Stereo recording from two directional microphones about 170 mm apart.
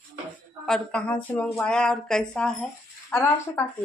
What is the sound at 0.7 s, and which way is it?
Speech, 5° left (ahead or behind).